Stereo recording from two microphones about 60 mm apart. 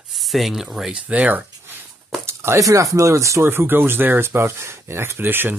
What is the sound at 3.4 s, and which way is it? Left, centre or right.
Speech, right.